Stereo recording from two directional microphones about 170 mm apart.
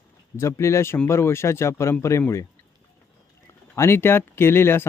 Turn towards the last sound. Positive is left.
turn(degrees=15)  # may be behind; listen again after turning